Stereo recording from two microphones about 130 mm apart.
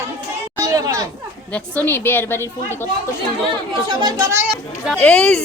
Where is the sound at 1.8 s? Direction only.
15° left (ahead or behind).